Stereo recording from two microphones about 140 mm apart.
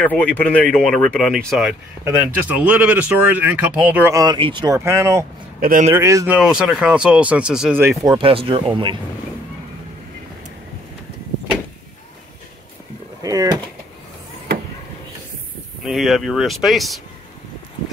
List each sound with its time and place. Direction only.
0.0 s speech: 10° left (ahead or behind); by 4.1 s 10° right (ahead or behind)
4.1 s speech: 25° right (ahead or behind)
4.7 s speech: 20° right (ahead or behind)
5.6 s speech: 80° right
5.9 s speech: 20° right (ahead or behind)
6.3 s speech: 5° right (ahead or behind)
8.0 s speech: 30° right (ahead or behind)
8.3 s speech: 40° right (ahead or behind)
13.2 s speech: 25° right (ahead or behind)
15.8 s speech: centre (ahead or behind)